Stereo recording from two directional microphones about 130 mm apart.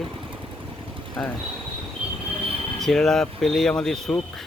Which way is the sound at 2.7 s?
5° left (ahead or behind).